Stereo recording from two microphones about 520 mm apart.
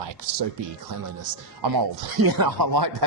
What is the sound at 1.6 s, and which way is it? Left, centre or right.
Speech, right.